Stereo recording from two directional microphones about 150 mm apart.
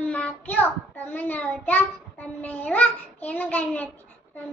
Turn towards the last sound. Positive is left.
turn(degrees=10)  # may be behind; listen again after turning